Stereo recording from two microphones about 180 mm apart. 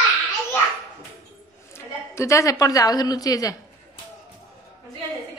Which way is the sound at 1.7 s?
15° left (ahead or behind).